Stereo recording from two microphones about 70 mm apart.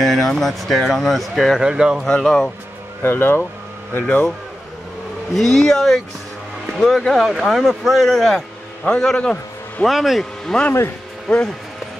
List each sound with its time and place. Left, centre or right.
0.0 s speech: centre
1.6 s speech: centre
2.0 s speech: centre
3.0 s speech: left
5.3 s a man's voice: centre
9.8 s speech: centre
10.4 s speech: centre